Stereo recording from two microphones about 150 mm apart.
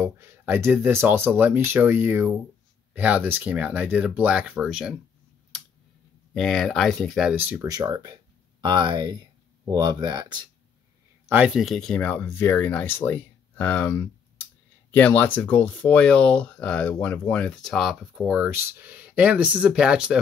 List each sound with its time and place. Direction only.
0.0 s speech: 15° right (ahead or behind)
5.5 s a sound: centre (ahead or behind)
6.3 s speech: centre (ahead or behind)
7.6 s speech: 25° right (ahead or behind)
11.2 s speech: 10° right (ahead or behind)